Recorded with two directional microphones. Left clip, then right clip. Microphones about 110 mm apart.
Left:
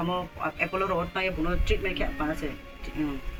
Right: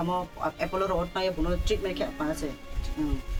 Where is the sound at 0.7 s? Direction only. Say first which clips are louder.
Right 1 dB; 5° right (ahead or behind).